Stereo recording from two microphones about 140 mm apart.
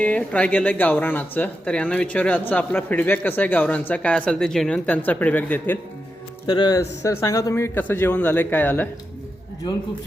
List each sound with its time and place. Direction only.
0.0 s speech: 10° left (ahead or behind)
6.5 s speech: 30° left (ahead or behind); by 8.9 s 15° left (ahead or behind)